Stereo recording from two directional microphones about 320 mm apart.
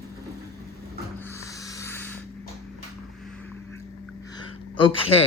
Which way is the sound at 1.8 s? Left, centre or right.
Centre.